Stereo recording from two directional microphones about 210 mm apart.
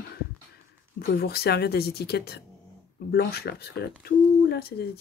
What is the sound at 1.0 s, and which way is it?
Speech, 45° left (ahead or behind).